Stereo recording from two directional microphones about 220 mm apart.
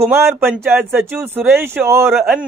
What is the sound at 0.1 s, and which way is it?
Speech, 10° right (ahead or behind).